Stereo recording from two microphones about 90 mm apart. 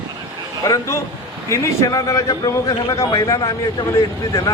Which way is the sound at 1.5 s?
40° left (ahead or behind).